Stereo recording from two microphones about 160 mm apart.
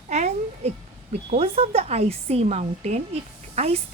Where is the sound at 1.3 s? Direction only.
40° right (ahead or behind).